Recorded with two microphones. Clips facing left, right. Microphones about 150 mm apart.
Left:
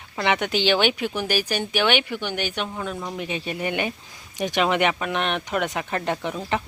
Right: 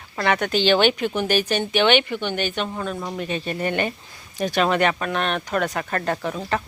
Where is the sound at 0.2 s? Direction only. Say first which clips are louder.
Right 2 dB; 15° left (ahead or behind).